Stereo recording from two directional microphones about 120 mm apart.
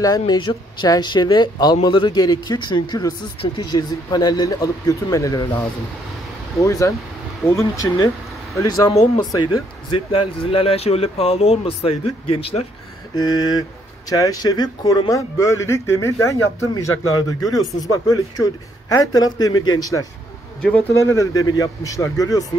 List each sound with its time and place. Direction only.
0.0 s speech: 35° left (ahead or behind)
6.6 s speech: 25° left (ahead or behind); by 12.6 s 50° left (ahead or behind)
13.1 s speech: 35° left (ahead or behind)